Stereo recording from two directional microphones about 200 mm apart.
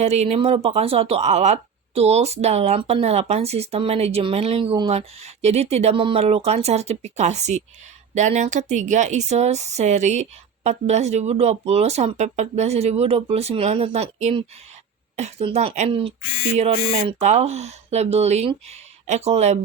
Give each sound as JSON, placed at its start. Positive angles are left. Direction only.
{"t": 0.0, "sound": "speech", "side_deg": -30}